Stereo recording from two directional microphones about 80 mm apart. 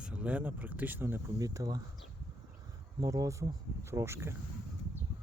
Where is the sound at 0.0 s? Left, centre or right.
Centre.